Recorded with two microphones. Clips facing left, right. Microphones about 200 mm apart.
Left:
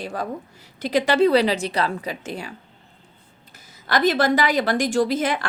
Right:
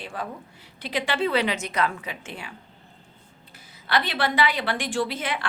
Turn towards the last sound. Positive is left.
turn(degrees=40)  # may be behind; listen again after turning